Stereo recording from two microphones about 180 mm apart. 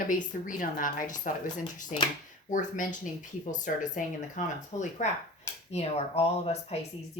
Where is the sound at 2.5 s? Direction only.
45° left (ahead or behind).